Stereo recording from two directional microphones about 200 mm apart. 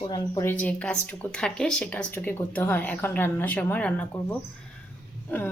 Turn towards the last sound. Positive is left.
turn(degrees=10)  # may be behind; listen again after turning